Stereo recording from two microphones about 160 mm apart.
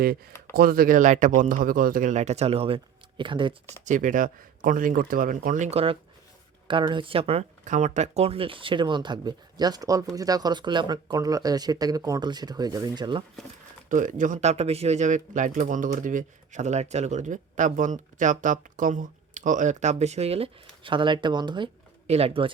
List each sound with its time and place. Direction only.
0.5 s speech: 70° right (ahead or behind); by 3.5 s 30° right (ahead or behind)
3.8 s speech: 55° right (ahead or behind); by 13.2 s 30° right (ahead or behind)
13.9 s speech: 55° right (ahead or behind); by 21.7 s 30° right (ahead or behind)
22.0 s speech: 40° right (ahead or behind)